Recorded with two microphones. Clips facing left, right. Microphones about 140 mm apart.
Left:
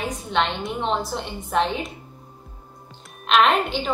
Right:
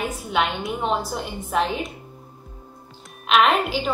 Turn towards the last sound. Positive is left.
turn(degrees=-5)  # may be behind; listen again after turning